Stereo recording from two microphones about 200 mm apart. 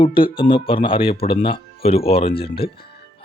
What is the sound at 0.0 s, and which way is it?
Speech, 25° left (ahead or behind).